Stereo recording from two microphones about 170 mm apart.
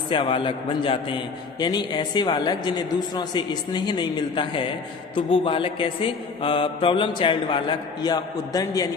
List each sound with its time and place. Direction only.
0.1 s a man's voice: 30° left (ahead or behind)